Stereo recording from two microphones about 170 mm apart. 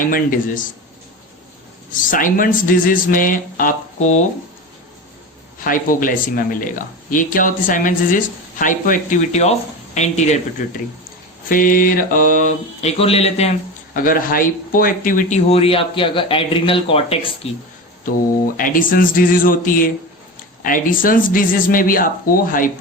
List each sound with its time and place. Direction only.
0.0 s a woman's voice: 50° left (ahead or behind)
1.9 s a woman's voice: 50° left (ahead or behind)
5.6 s a woman's voice: 55° left (ahead or behind)
11.4 s a woman's voice: 55° left (ahead or behind); by 13.5 s 40° left (ahead or behind)
13.9 s speech: 55° left (ahead or behind)
15.4 s speech: 35° left (ahead or behind)
18.5 s speech: 55° left (ahead or behind)